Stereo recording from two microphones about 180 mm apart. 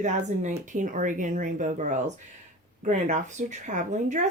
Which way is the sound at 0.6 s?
45° right (ahead or behind).